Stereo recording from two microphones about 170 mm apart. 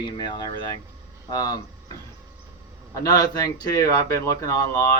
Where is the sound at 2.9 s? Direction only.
20° left (ahead or behind).